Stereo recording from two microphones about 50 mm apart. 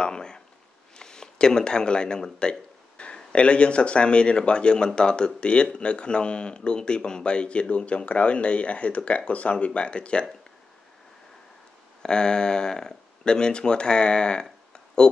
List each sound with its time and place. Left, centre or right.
0.0 s speech: centre
12.0 s speech: centre